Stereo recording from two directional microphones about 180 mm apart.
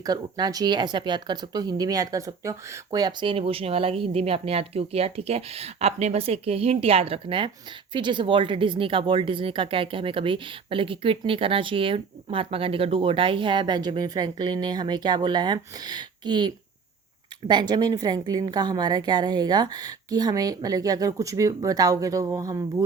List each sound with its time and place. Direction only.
0.0 s speech: 20° right (ahead or behind)
17.5 s speech: 25° right (ahead or behind)